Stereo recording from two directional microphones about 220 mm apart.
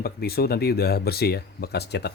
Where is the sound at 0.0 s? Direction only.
45° left (ahead or behind).